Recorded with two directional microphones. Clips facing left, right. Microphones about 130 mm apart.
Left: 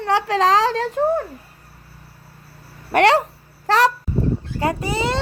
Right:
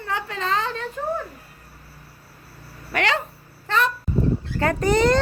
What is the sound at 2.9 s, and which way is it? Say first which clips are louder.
Speech: left 9 dB; 70° left (ahead or behind).